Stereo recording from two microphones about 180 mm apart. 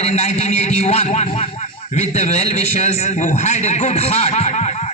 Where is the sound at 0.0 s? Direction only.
35° left (ahead or behind).